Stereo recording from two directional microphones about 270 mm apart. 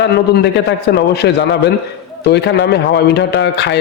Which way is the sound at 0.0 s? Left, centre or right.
Left.